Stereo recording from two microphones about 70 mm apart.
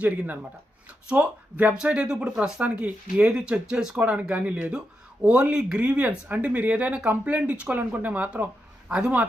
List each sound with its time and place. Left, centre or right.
1.0 s speech: centre